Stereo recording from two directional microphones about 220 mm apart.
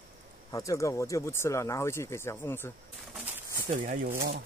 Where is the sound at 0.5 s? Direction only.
15° left (ahead or behind).